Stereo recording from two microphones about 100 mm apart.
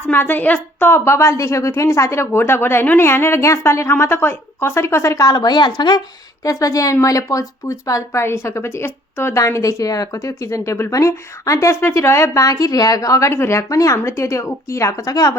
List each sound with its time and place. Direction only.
0.1 s a woman's voice: 20° left (ahead or behind); by 6.0 s 45° left (ahead or behind)
6.4 s speech: 35° left (ahead or behind)